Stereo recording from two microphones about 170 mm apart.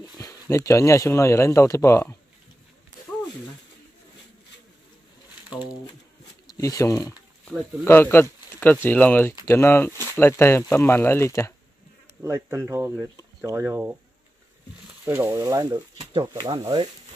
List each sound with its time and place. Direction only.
0.0 s speech: 20° left (ahead or behind)
6.5 s speech: 20° left (ahead or behind)
12.2 s speech: 15° right (ahead or behind)
15.0 s speech: 15° right (ahead or behind)